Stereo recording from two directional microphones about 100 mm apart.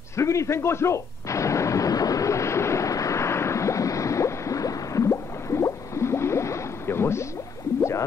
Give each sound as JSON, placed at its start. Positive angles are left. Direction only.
{"t": 0.1, "sound": "artillery fire", "side_deg": 30}